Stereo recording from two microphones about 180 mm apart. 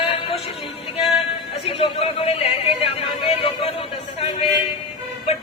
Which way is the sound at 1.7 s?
30° left (ahead or behind).